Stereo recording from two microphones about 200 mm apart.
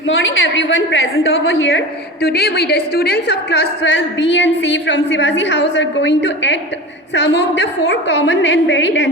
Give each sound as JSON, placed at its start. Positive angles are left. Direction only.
{"t": 0.1, "sound": "a woman's voice", "side_deg": 75}
{"t": 2.2, "sound": "a woman's voice", "side_deg": 55}